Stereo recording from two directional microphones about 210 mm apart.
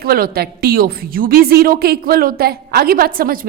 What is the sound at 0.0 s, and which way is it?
A woman's voice, 45° right (ahead or behind).